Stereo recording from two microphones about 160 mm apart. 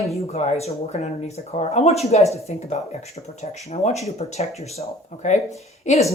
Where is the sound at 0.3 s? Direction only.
40° left (ahead or behind).